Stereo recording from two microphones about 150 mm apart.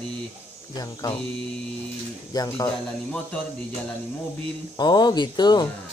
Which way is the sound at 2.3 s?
25° left (ahead or behind).